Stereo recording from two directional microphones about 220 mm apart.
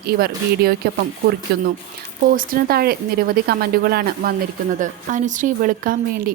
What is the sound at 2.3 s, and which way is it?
A woman's voice, 40° right (ahead or behind).